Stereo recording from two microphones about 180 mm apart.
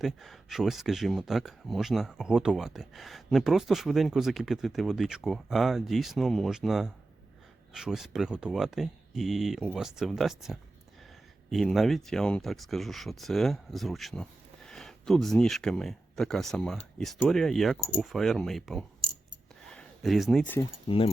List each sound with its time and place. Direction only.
0.0 s speech: centre (ahead or behind)
20.8 s speech: 30° left (ahead or behind)